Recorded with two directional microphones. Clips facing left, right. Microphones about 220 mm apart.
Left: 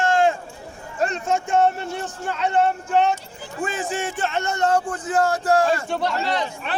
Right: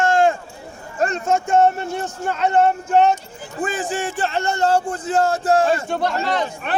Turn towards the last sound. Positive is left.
turn(degrees=-50)  # may be behind; listen again after turning